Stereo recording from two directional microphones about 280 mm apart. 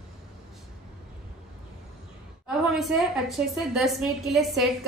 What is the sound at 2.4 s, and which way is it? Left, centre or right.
A woman's voice, centre.